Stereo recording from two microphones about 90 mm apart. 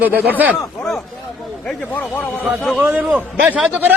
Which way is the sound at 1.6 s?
20° left (ahead or behind).